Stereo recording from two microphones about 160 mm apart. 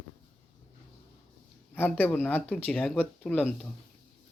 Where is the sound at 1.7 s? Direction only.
10° left (ahead or behind).